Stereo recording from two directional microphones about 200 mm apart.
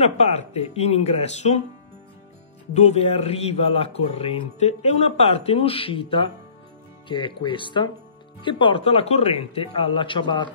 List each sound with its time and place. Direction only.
0.0 s speech: 30° left (ahead or behind)
2.7 s a man's voice: 35° left (ahead or behind)